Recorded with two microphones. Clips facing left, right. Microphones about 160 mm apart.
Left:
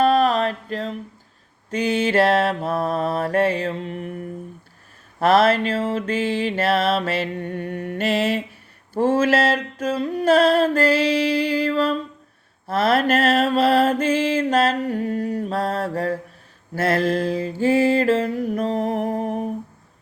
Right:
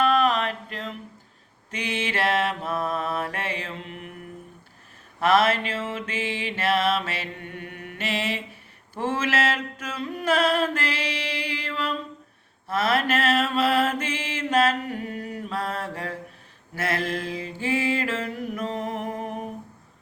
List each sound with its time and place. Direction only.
0.0 s mantra: 35° left (ahead or behind)
6.0 s mantra: 45° left (ahead or behind)